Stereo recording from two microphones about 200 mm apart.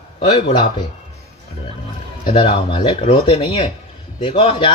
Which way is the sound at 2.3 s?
25° left (ahead or behind).